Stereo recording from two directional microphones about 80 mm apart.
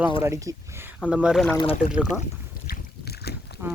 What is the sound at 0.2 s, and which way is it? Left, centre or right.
Speech, right.